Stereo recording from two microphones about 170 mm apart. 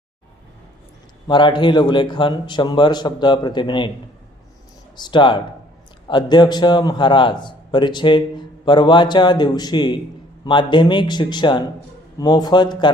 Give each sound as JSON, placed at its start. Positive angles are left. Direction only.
{"t": 1.3, "sound": "a man's voice", "side_deg": 25}
{"t": 4.9, "sound": "a man's voice", "side_deg": 25}